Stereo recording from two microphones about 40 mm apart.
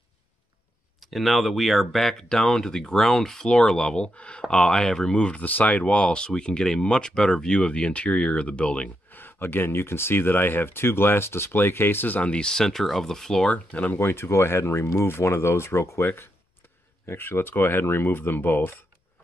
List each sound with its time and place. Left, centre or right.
1.1 s speech: centre
3.4 s speech: left
5.4 s speech: left
9.1 s speech: left
12.2 s speech: left
12.6 s speech: centre
13.5 s speech: left
13.9 s speech: left
17.1 s speech: left